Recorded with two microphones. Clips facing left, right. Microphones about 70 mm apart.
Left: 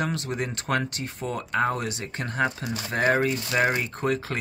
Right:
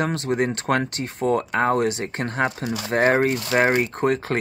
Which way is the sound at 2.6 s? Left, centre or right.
Right.